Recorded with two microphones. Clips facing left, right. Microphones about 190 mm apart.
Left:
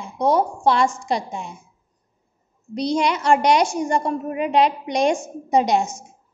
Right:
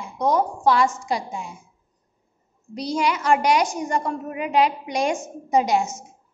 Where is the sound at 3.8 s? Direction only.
30° left (ahead or behind).